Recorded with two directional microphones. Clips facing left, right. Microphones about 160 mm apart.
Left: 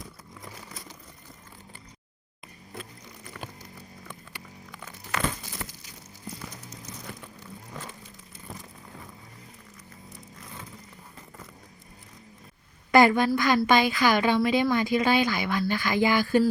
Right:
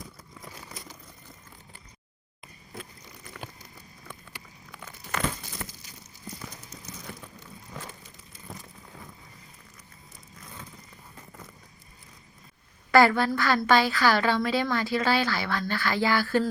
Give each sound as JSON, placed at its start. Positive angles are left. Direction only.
{"t": 12.9, "sound": "a woman's voice", "side_deg": 20}